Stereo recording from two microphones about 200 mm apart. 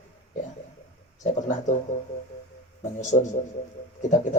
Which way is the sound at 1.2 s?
40° left (ahead or behind).